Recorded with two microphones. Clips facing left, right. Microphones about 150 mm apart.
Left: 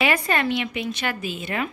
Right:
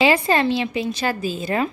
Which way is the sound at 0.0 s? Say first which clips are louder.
Right 5 dB; 30° right (ahead or behind).